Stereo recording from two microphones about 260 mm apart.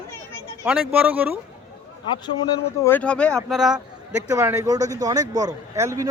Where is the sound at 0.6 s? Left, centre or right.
Centre.